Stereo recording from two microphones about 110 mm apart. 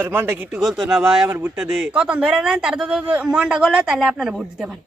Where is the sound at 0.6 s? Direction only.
Centre (ahead or behind).